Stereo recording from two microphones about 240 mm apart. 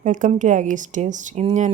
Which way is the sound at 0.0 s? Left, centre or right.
Right.